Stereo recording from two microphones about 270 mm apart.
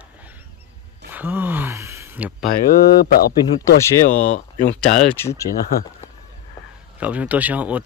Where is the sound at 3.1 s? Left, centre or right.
Left.